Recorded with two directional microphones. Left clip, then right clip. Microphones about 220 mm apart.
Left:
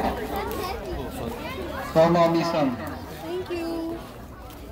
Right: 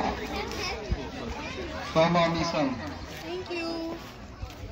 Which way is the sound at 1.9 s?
55° left (ahead or behind).